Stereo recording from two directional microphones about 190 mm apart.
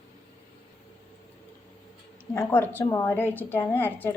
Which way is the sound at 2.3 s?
10° left (ahead or behind).